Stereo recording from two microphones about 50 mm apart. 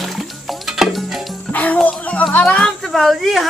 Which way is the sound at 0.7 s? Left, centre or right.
Centre.